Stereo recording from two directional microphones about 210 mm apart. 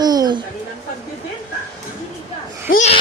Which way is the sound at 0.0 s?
20° right (ahead or behind).